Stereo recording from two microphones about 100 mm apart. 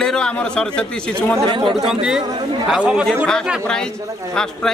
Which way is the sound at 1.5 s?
60° right (ahead or behind).